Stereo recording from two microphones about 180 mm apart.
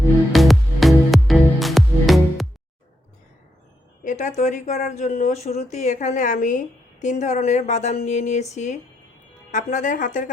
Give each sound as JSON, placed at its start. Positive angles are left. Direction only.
{"t": 0.3, "sound": "music", "side_deg": 0}
{"t": 4.0, "sound": "speech", "side_deg": 45}